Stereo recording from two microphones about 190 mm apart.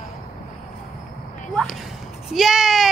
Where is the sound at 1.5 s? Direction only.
Centre (ahead or behind).